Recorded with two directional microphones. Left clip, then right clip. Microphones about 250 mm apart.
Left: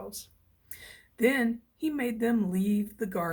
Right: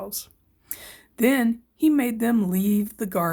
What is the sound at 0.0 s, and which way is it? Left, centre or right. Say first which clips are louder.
Speech: right 7 dB; right.